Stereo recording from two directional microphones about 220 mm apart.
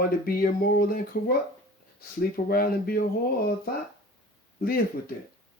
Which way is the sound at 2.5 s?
45° left (ahead or behind).